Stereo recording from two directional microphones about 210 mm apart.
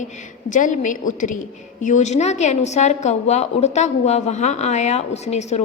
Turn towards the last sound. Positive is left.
turn(degrees=30)  # may be behind; listen again after turning